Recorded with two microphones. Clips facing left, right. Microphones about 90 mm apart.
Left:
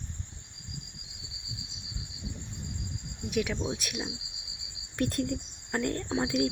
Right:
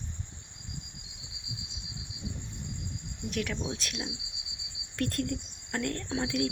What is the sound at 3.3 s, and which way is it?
Speech, 10° left (ahead or behind).